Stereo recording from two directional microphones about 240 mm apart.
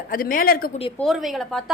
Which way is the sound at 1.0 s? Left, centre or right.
Centre.